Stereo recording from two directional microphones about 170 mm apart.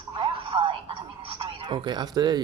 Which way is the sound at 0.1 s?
30° right (ahead or behind).